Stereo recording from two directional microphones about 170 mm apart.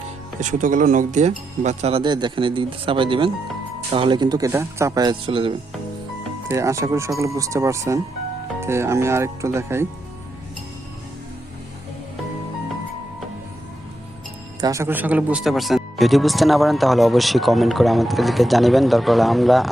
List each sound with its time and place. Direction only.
0.3 s speech: 45° right (ahead or behind); by 5.5 s 30° right (ahead or behind)
6.5 s speech: 15° right (ahead or behind)
14.6 s speech: 20° right (ahead or behind); by 19.7 s centre (ahead or behind)